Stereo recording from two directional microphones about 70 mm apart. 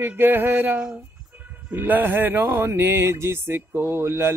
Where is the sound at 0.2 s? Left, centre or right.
Right.